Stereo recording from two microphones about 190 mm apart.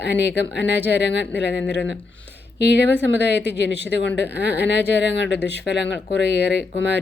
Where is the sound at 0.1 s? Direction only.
60° left (ahead or behind).